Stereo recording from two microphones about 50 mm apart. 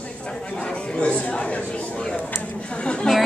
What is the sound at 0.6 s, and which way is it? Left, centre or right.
Speech, left.